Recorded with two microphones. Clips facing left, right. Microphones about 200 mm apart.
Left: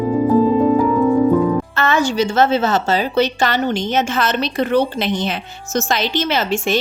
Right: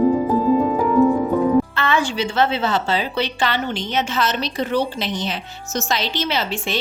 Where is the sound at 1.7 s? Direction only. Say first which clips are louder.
Left 3 dB; 45° left (ahead or behind).